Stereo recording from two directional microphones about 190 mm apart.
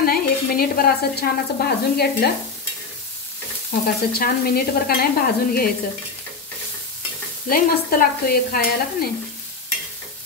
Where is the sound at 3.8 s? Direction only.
55° left (ahead or behind).